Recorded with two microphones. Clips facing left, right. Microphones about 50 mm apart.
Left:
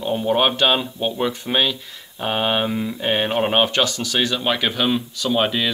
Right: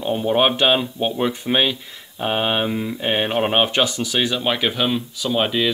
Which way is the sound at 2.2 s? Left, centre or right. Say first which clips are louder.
Even; centre.